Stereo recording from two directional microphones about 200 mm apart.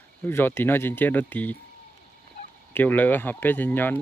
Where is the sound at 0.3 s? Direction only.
10° left (ahead or behind).